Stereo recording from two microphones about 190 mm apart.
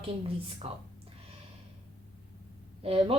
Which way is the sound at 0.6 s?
35° right (ahead or behind).